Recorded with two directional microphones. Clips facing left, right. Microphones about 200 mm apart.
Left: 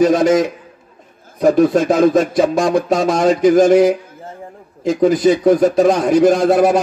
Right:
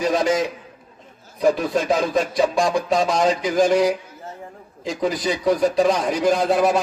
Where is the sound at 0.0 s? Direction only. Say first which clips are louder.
Left 8 dB; 50° left (ahead or behind).